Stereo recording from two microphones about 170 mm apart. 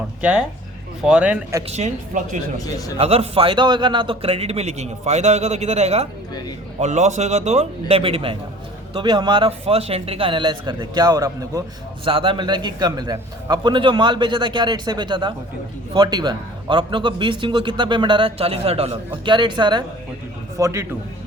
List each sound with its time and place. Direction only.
0.2 s speech: 5° right (ahead or behind)
1.7 s speech: 45° right (ahead or behind)
2.6 s speech: 20° left (ahead or behind)
3.0 s a man's voice: 35° right (ahead or behind); by 11.6 s 20° right (ahead or behind)
12.0 s a man's voice: 30° right (ahead or behind)
20.6 s speech: 15° right (ahead or behind)